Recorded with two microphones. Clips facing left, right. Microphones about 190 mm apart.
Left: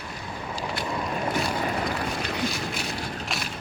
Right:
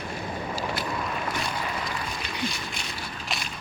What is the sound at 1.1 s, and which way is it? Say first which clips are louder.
Boat: left 4 dB; 40° left (ahead or behind).